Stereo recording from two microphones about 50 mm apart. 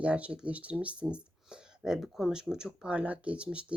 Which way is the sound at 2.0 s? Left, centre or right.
Centre.